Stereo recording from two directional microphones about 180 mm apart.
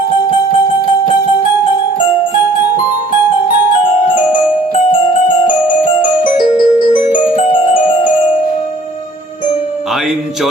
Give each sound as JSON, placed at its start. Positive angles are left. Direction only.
{"t": 6.2, "sound": "music", "side_deg": 50}